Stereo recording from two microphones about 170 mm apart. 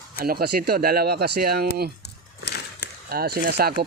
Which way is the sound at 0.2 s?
65° right (ahead or behind).